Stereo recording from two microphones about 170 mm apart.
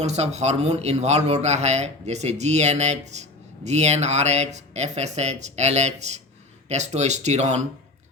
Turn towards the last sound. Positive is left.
turn(degrees=-40)  # may be behind; listen again after turning